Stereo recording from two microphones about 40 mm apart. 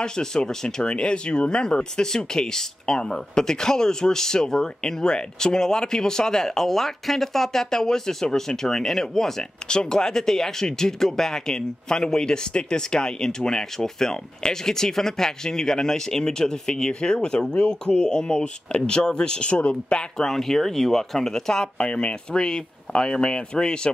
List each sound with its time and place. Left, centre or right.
0.0 s speech: centre
20.2 s speech: centre
21.8 s speech: left